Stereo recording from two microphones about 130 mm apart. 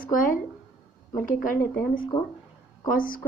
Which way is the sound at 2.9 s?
90° left.